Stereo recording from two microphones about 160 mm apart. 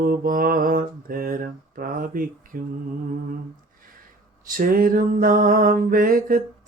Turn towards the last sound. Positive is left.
turn(degrees=-60)  # may be behind; listen again after turning